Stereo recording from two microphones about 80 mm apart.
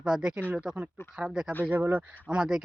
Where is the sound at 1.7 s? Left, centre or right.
Right.